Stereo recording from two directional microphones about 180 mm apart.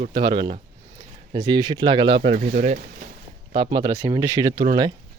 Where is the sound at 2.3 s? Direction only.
45° right (ahead or behind).